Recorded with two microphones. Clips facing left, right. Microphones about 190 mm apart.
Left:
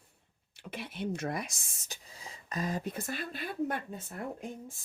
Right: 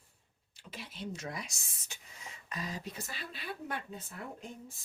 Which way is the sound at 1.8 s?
35° left (ahead or behind).